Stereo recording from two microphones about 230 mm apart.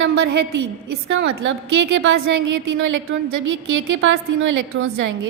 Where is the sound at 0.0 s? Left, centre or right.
Right.